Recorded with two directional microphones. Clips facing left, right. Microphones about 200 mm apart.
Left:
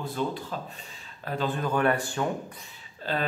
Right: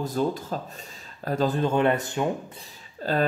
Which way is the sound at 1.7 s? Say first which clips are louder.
Right 3 dB; 25° right (ahead or behind).